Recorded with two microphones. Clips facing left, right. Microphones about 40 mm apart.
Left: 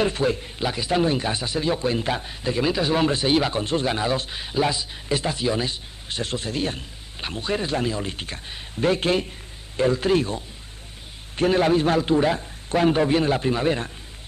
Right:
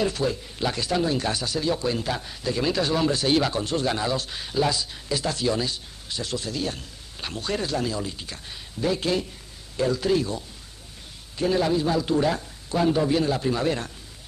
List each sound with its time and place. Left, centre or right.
0.0 s a man's voice: left
0.6 s speech: centre
0.9 s speech: left
2.9 s speech: left
6.0 s a man's voice: left
8.1 s a man's voice: left
12.1 s speech: left
12.7 s a man's voice: left